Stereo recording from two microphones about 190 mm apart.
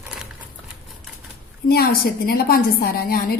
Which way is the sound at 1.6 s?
55° left (ahead or behind).